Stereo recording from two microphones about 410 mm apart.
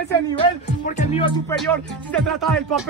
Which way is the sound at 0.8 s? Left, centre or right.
Centre.